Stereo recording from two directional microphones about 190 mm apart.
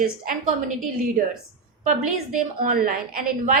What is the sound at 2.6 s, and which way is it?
Speech, 50° right (ahead or behind).